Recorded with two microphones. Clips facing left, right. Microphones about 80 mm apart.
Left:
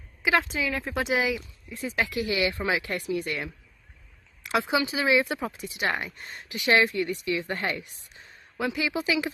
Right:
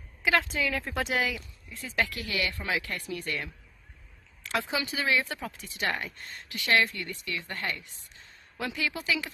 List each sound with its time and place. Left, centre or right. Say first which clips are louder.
0.2 s speech: left 2 dB; centre; by 3.0 s left
3.1 s speech: left 5 dB; centre
8.5 s speech: left 5 dB; centre